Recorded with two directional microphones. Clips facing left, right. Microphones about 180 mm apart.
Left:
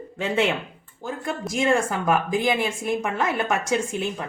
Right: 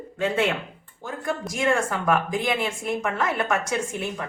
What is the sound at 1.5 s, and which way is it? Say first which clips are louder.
Speech: left 3 dB; 25° left (ahead or behind).